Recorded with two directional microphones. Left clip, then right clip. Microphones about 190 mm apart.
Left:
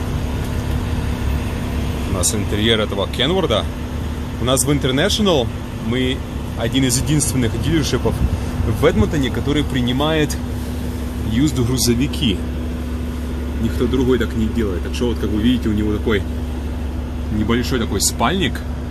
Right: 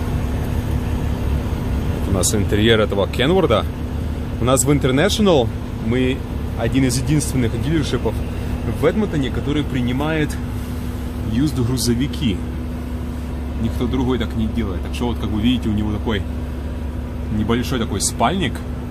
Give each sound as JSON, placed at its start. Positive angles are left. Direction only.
{"t": 2.1, "sound": "speech", "side_deg": -25}
{"t": 11.4, "sound": "speech", "side_deg": -5}
{"t": 13.9, "sound": "speech", "side_deg": -15}
{"t": 17.5, "sound": "speech", "side_deg": -10}